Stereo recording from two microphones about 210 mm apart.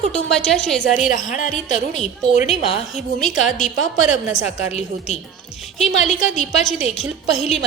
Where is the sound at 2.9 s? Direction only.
Centre (ahead or behind).